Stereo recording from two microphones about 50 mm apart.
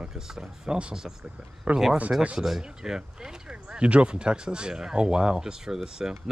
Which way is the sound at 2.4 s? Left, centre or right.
Centre.